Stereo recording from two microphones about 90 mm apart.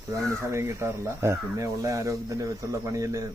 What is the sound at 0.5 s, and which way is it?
Speech, 30° right (ahead or behind).